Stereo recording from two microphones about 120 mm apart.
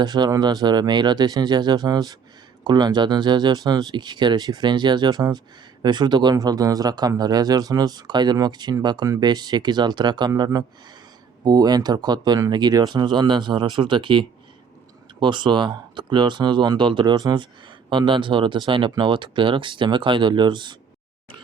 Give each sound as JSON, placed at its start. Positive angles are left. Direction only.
{"t": 0.0, "sound": "speech", "side_deg": -35}